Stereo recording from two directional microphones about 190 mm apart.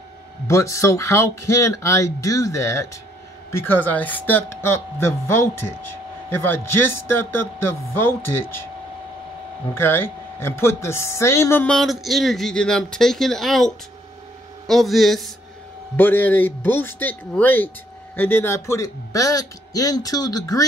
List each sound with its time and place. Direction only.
0.5 s speech: 15° left (ahead or behind)
9.8 s speech: 10° left (ahead or behind)